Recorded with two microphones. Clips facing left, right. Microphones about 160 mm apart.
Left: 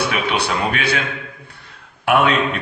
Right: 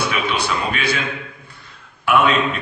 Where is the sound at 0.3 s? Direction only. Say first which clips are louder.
Left 2 dB; 65° left (ahead or behind).